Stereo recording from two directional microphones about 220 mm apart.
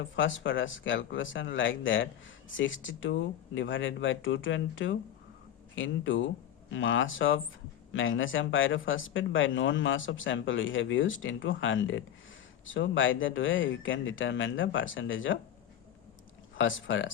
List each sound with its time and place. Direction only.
0.0 s speech: 60° left (ahead or behind)
16.6 s speech: 60° left (ahead or behind)